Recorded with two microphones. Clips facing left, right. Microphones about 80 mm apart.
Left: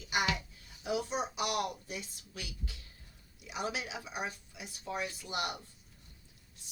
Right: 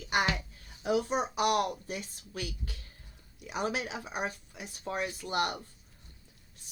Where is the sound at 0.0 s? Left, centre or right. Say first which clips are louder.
Right 4 dB; right.